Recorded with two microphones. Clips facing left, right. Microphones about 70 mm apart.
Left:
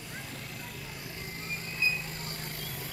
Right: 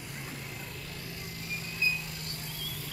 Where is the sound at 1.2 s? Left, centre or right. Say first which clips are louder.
Left 2 dB; left.